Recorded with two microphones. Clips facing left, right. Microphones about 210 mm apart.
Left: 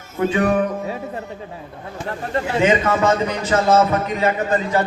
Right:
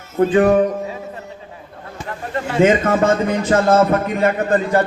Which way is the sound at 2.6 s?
50° right (ahead or behind).